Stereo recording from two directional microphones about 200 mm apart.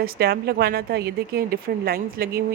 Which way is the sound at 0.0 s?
50° right (ahead or behind).